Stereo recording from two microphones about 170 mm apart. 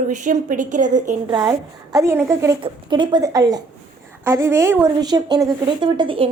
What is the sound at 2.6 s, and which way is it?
A woman's voice, 25° right (ahead or behind).